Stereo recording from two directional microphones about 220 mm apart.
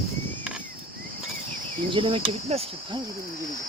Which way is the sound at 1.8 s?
25° right (ahead or behind).